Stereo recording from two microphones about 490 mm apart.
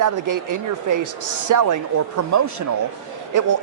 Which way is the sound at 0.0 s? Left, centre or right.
Right.